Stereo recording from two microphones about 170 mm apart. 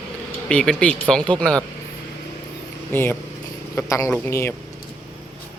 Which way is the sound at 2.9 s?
15° left (ahead or behind).